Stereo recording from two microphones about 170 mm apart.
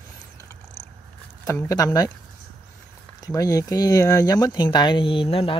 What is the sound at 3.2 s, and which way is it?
Speech, 20° left (ahead or behind).